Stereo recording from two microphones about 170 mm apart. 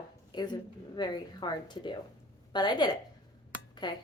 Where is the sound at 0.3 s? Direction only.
25° left (ahead or behind).